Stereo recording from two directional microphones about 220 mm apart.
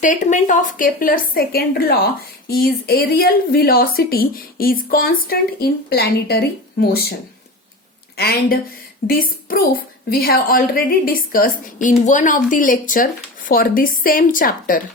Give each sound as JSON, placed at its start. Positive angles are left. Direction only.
{"t": 0.0, "sound": "a woman's voice", "side_deg": 35}
{"t": 8.1, "sound": "a woman's voice", "side_deg": 45}